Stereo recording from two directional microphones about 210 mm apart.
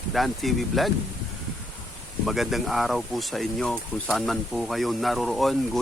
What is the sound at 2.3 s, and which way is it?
Speech, centre (ahead or behind).